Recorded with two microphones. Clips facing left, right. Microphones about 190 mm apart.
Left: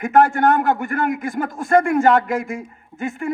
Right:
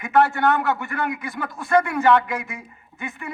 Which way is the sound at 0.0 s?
45° left (ahead or behind).